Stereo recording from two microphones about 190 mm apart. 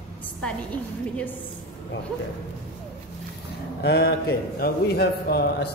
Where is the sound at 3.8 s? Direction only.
60° left (ahead or behind).